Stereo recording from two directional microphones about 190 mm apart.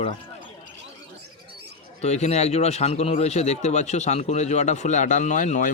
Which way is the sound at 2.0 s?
35° left (ahead or behind).